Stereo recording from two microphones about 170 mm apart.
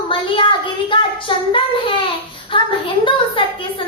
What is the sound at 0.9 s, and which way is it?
Child singing, 30° left (ahead or behind).